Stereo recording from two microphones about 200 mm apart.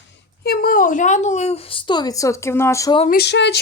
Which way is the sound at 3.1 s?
55° left (ahead or behind).